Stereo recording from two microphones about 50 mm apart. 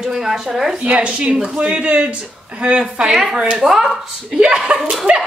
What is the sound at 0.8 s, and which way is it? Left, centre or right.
Speech, right.